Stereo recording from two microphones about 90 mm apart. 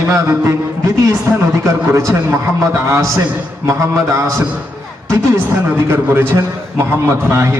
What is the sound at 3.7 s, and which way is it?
A man's voice, 35° right (ahead or behind).